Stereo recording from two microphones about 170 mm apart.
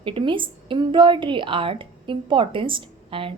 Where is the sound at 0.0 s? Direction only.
30° right (ahead or behind).